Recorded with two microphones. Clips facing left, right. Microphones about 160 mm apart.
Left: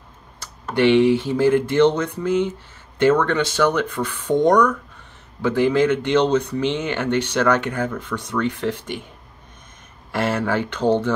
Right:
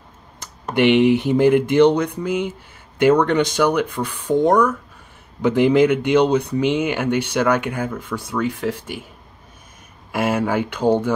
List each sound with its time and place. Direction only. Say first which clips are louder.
0.7 s speech: right 1 dB; 15° right (ahead or behind)
5.4 s speech: right 3 dB; 15° right (ahead or behind)
10.1 s speech: right 2 dB; 10° right (ahead or behind)